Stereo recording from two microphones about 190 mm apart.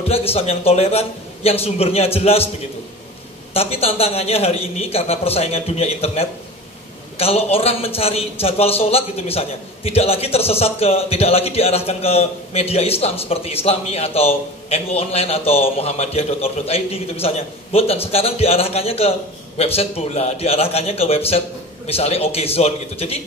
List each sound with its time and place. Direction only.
0.3 s a man's voice: 30° left (ahead or behind)
3.5 s a man's voice: 30° left (ahead or behind)